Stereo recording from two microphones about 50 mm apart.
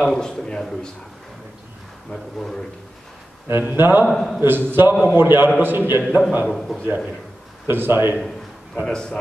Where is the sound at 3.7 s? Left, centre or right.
Right.